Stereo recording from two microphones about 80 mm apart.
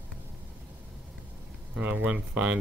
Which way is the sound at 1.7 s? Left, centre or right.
Centre.